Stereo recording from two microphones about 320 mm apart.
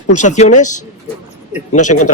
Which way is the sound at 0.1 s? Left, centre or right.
Left.